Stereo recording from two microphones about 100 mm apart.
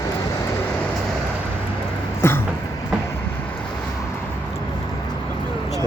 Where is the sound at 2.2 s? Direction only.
25° left (ahead or behind).